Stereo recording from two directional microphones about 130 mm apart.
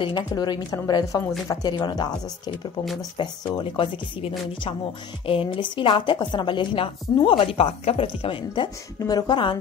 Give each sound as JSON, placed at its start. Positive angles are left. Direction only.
{"t": 0.0, "sound": "a woman's voice", "side_deg": 35}
{"t": 2.8, "sound": "speech", "side_deg": 0}
{"t": 3.2, "sound": "a woman's voice", "side_deg": 40}